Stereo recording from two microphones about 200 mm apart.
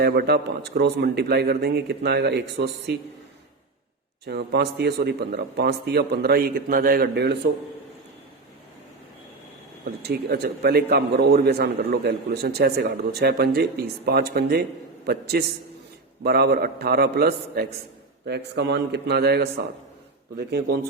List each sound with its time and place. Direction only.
0.0 s speech: 50° right (ahead or behind)
4.3 s a man's voice: 55° right (ahead or behind)
9.8 s a man's voice: 55° right (ahead or behind)